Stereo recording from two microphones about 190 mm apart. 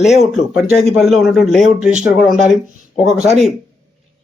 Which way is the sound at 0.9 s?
Centre (ahead or behind).